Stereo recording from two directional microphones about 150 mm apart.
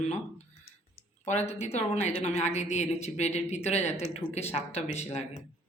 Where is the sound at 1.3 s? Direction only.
50° left (ahead or behind).